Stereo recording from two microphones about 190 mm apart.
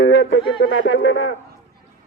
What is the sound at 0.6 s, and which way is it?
Speech, 90° left.